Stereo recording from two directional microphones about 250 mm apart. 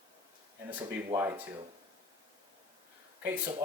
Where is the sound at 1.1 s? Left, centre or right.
Centre.